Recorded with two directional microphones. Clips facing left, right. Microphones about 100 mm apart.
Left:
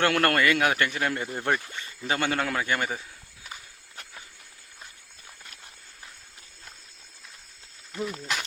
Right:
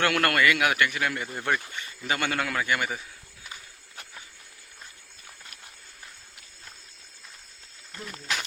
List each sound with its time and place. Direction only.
0.0 s a man's voice: 30° left (ahead or behind)
3.4 s walk: centre (ahead or behind)
7.9 s speech: 10° left (ahead or behind)